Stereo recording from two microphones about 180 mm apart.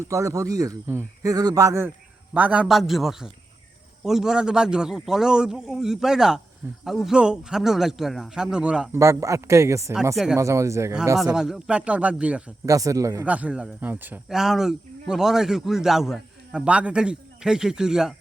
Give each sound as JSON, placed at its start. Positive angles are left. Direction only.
{"t": 0.1, "sound": "a man's voice", "side_deg": -20}
{"t": 9.0, "sound": "speech", "side_deg": -15}
{"t": 11.2, "sound": "a man's voice", "side_deg": -5}
{"t": 12.6, "sound": "a man's voice", "side_deg": -20}